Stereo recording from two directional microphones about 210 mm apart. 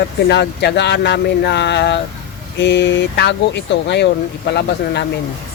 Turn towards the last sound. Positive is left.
turn(degrees=55)  # may be behind; listen again after turning